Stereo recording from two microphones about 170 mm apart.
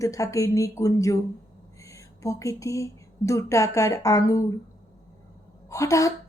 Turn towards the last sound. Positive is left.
turn(degrees=20)  # may be behind; listen again after turning